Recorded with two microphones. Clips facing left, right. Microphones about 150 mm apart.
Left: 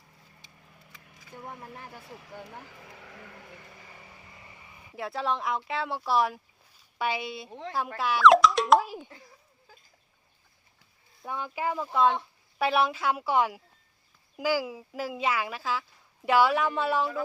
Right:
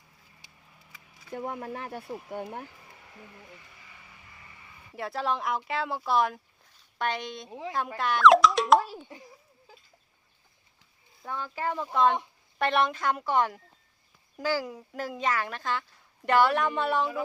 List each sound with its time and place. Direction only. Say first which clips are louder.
1.3 s speech: right 8 dB; 70° right (ahead or behind)
2.6 s a sound: left 4 dB; 90° left
3.6 s vehicle: left 5 dB; 45° left (ahead or behind)
4.9 s speech: even; centre (ahead or behind)
9.1 s a child's voice: right 4 dB; 15° right (ahead or behind)
11.3 s speech: left 1 dB; 15° left (ahead or behind)